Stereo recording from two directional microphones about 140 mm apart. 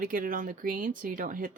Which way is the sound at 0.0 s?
80° right.